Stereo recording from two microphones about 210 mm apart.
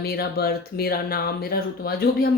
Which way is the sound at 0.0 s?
45° left (ahead or behind).